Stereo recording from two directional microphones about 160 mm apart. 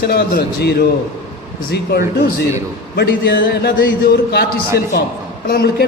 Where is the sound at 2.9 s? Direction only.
90° left.